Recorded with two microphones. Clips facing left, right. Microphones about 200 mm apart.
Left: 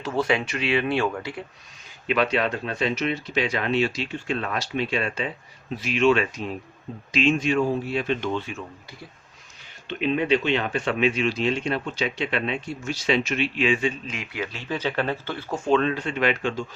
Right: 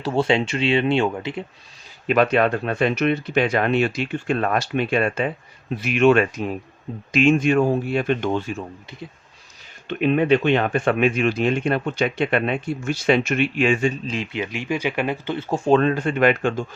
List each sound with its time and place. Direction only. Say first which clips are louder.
0.0 s speech: right 4 dB; 30° right (ahead or behind)
2.0 s speech: right 5 dB; 50° right (ahead or behind)
9.8 s speech: right 5 dB; 55° right (ahead or behind)
14.1 s speech: right 6 dB; 30° right (ahead or behind)
14.4 s speech: right 1 dB; 15° right (ahead or behind)
15.4 s speech: right 4 dB; 35° right (ahead or behind); by 16.6 s 50° right (ahead or behind)